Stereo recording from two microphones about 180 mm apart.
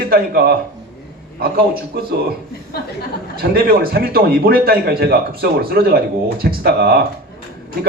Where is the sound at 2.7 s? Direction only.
60° left (ahead or behind).